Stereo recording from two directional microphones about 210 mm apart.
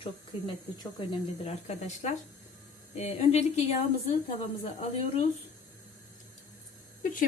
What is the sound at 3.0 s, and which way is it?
Speech, 30° left (ahead or behind).